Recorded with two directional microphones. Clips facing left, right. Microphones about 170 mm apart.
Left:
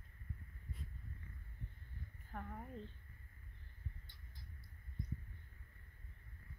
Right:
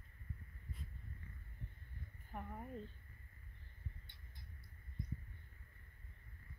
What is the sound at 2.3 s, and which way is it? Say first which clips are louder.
Speech: even; 5° right (ahead or behind).